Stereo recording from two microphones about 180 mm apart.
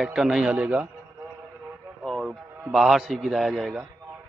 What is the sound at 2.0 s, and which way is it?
A man's voice, centre (ahead or behind).